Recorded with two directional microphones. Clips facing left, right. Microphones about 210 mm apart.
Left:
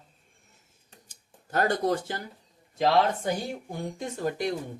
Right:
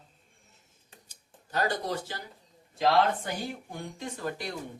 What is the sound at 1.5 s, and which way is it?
Speech, 50° left (ahead or behind).